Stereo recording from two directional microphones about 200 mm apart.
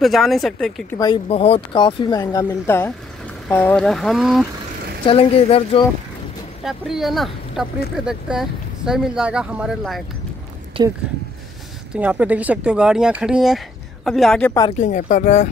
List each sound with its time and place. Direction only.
0.0 s speech: centre (ahead or behind)
0.9 s speech: 20° left (ahead or behind); by 4.5 s centre (ahead or behind)
5.0 s speech: 25° left (ahead or behind)
6.6 s speech: centre (ahead or behind)
10.8 s speech: 30° right (ahead or behind)
11.9 s speech: 5° right (ahead or behind)
14.8 s speech: 40° left (ahead or behind)